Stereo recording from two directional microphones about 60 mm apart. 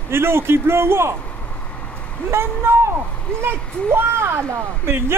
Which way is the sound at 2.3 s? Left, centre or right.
Right.